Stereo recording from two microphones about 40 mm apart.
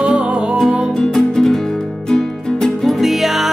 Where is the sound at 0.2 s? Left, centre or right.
Right.